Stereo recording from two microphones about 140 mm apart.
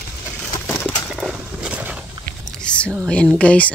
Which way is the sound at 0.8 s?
5° right (ahead or behind).